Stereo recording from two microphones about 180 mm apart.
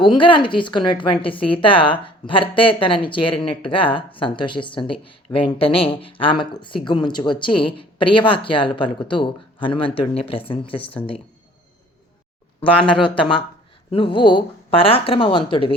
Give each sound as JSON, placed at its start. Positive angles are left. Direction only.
{"t": 0.0, "sound": "a woman's voice", "side_deg": 25}
{"t": 12.5, "sound": "a woman's voice", "side_deg": 25}